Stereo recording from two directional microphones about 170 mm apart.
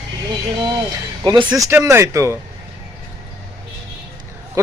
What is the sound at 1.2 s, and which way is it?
Speech, 25° right (ahead or behind).